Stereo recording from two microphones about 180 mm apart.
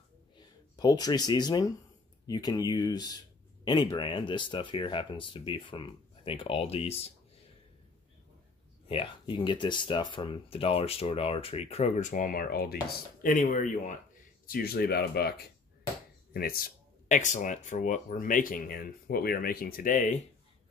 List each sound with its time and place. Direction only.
0.4 s speech: 20° left (ahead or behind)
8.8 s speech: 30° left (ahead or behind); by 12.7 s 60° left (ahead or behind)
13.2 s speech: 50° left (ahead or behind)
14.4 s speech: 55° left (ahead or behind)